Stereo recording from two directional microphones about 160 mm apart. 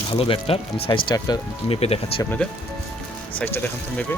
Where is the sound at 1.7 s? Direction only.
40° left (ahead or behind).